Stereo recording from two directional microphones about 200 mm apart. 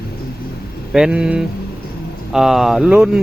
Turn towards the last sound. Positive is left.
turn(degrees=-5)  # may be behind; listen again after turning